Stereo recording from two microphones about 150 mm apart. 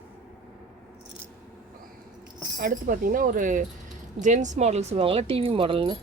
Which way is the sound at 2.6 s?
65° right (ahead or behind).